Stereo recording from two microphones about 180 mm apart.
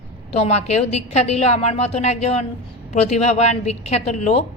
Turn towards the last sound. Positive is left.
turn(degrees=35)  # may be behind; listen again after turning